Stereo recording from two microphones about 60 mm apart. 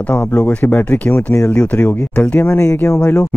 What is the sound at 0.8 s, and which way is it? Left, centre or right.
Speech, left.